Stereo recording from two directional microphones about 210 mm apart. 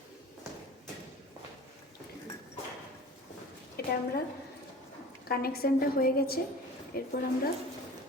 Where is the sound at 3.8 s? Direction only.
45° left (ahead or behind).